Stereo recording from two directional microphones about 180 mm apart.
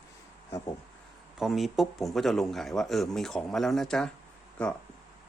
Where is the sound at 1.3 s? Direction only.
Centre (ahead or behind).